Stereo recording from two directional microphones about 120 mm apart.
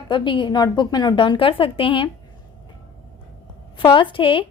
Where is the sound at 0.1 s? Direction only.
40° left (ahead or behind).